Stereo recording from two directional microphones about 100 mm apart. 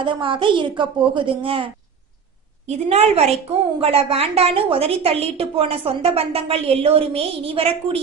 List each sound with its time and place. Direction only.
0.0 s speech: 55° right (ahead or behind)
2.6 s a woman's voice: 90° right
3.8 s a woman's voice: 80° right